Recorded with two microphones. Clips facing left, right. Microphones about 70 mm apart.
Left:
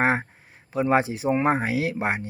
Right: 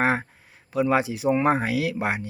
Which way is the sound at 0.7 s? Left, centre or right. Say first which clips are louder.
Even; left.